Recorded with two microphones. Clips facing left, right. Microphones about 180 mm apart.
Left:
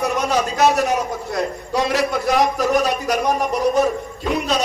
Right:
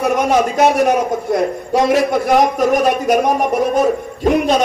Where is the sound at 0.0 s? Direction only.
50° right (ahead or behind).